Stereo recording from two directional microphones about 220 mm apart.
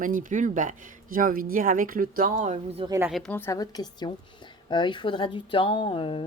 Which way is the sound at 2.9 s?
10° right (ahead or behind).